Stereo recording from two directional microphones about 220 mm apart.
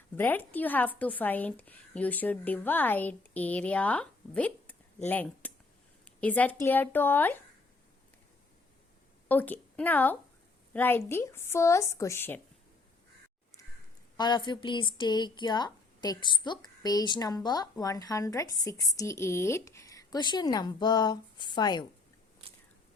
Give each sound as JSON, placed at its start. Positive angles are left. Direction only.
{"t": 0.2, "sound": "a woman's voice", "side_deg": 10}
{"t": 9.3, "sound": "a woman's voice", "side_deg": 10}
{"t": 14.2, "sound": "speech", "side_deg": 20}